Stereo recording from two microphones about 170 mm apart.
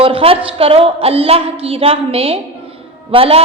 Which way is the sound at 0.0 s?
35° right (ahead or behind).